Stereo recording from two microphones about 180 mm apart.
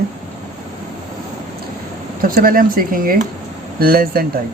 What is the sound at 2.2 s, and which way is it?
Speech, 50° right (ahead or behind).